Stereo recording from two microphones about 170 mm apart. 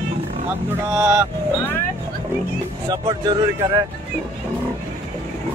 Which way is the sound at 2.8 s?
25° right (ahead or behind).